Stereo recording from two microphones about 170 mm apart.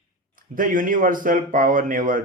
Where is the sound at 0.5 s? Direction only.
55° right (ahead or behind).